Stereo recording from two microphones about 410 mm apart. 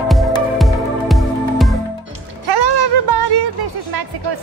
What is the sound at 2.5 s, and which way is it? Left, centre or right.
Music, right.